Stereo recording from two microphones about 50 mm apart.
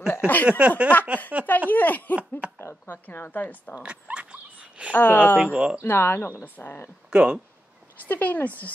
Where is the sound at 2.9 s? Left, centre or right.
Left.